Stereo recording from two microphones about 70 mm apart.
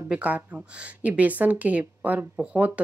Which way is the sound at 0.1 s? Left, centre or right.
Right.